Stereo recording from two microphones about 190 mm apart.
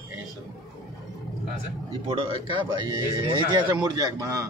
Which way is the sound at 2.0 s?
30° right (ahead or behind).